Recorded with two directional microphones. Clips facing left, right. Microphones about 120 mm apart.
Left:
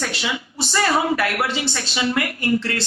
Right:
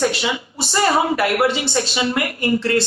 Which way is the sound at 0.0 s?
20° right (ahead or behind).